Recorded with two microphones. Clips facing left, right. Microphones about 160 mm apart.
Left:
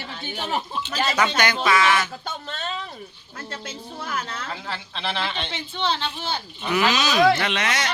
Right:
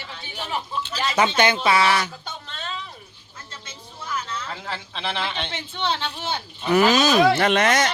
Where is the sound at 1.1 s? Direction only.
25° right (ahead or behind).